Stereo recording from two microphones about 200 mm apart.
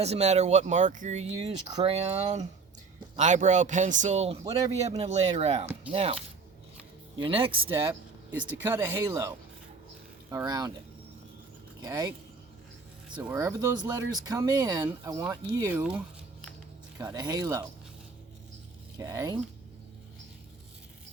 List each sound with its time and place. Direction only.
0.0 s speech: 30° right (ahead or behind)
7.2 s speech: 25° right (ahead or behind)
8.6 s speech: 10° right (ahead or behind)
11.8 s speech: 20° right (ahead or behind)
13.1 s speech: 10° right (ahead or behind)
17.0 s speech: 20° right (ahead or behind)
18.9 s speech: 15° right (ahead or behind)